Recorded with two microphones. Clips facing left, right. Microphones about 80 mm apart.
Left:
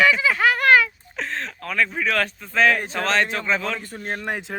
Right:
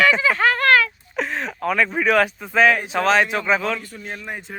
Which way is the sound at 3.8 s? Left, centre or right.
Left.